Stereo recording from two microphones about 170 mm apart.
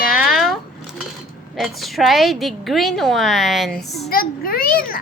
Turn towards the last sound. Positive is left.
turn(degrees=60)  # may be behind; listen again after turning